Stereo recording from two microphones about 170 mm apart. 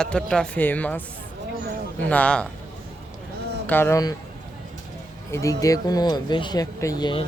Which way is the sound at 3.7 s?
15° left (ahead or behind).